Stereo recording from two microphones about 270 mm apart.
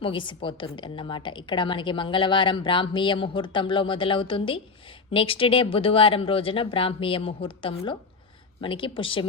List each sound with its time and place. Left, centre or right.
0.0 s a woman's voice: centre